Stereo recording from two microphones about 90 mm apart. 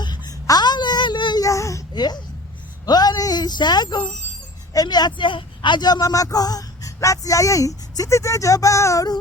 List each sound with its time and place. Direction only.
0.0 s a sound: 50° left (ahead or behind)
1.5 s babbling: 35° left (ahead or behind)
1.9 s speech: 50° left (ahead or behind); by 9.0 s 35° left (ahead or behind)